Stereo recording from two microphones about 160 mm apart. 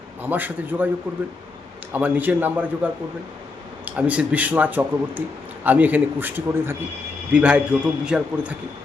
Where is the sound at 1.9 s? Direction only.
10° right (ahead or behind).